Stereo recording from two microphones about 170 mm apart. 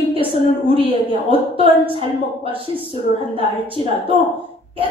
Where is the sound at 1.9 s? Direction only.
30° right (ahead or behind).